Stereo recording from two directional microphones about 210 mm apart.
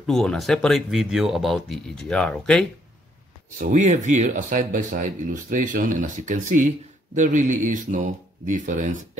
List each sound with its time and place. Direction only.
0.0 s speech: centre (ahead or behind)
3.5 s speech: 35° right (ahead or behind)